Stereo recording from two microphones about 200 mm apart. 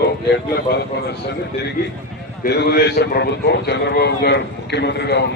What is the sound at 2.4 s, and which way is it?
A man's voice, 55° left (ahead or behind).